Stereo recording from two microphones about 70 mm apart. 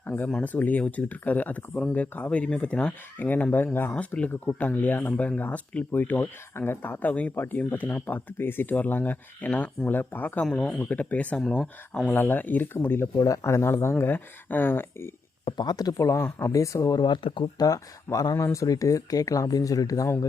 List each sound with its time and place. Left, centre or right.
0.0 s speech: left
3.9 s speech: centre
10.4 s speech: centre
11.3 s speech: centre
12.1 s speech: left
13.2 s speech: left
14.0 s speech: left
15.5 s speech: left
16.1 s speech: left
16.5 s speech: left
17.0 s speech: left